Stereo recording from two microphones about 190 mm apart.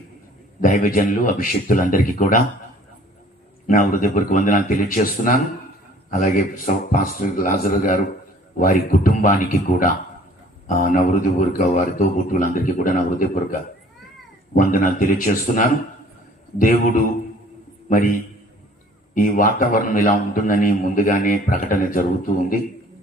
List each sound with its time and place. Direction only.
0.6 s a man's voice: 50° left (ahead or behind)
3.7 s a man's voice: 45° left (ahead or behind)